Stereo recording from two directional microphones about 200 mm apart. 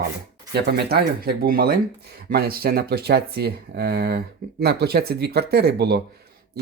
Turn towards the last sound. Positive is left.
turn(degrees=-55)  # may be behind; listen again after turning